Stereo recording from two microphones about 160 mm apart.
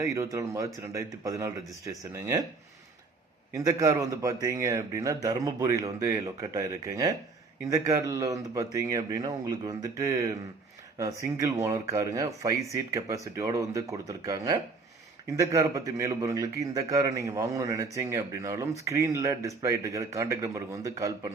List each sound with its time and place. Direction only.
0.0 s a man's voice: 20° right (ahead or behind)
3.5 s a man's voice: 20° right (ahead or behind)